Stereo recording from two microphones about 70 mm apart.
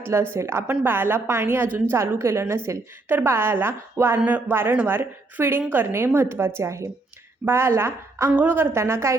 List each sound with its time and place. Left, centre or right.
0.0 s a woman's voice: right
6.6 s a woman's voice: right
8.3 s speech: right
8.6 s a woman's voice: right